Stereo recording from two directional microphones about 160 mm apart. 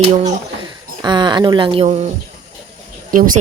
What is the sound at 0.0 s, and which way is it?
Speech, 40° right (ahead or behind).